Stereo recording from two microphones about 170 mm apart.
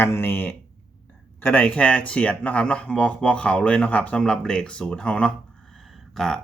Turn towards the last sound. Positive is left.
turn(degrees=5)  # may be behind; listen again after turning